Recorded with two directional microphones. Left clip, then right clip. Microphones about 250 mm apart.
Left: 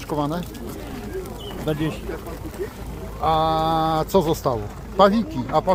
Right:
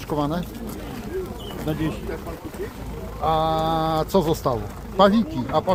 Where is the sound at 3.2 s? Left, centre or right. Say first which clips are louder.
Left 2 dB; centre.